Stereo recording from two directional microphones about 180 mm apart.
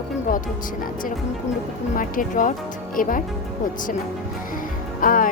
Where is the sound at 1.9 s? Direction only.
50° left (ahead or behind).